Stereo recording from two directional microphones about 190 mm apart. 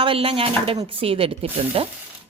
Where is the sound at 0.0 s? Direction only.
30° right (ahead or behind).